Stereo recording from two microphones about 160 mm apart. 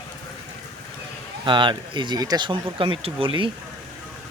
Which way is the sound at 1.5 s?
30° right (ahead or behind).